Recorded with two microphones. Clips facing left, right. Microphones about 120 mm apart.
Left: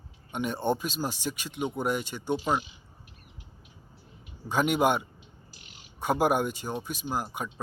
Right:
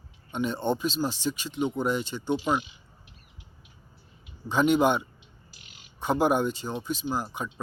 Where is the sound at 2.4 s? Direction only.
40° left (ahead or behind).